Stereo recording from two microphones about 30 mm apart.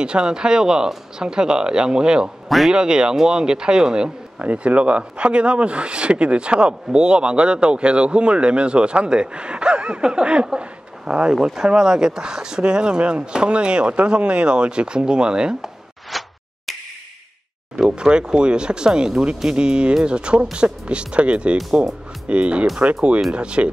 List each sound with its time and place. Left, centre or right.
0.0 s speech: right
4.4 s speech: right
16.1 s a sound: centre
17.8 s speech: right